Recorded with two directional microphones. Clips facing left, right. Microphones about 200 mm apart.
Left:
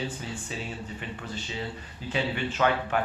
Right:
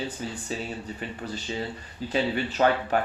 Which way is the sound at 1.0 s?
40° right (ahead or behind).